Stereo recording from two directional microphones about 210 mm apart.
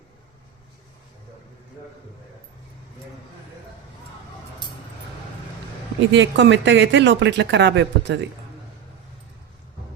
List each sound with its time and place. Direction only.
6.1 s speech: 60° right (ahead or behind)